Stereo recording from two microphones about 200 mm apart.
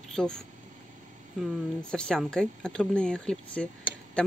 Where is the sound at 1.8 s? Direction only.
5° left (ahead or behind).